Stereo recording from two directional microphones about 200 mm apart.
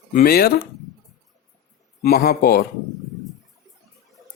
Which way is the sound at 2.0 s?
50° left (ahead or behind).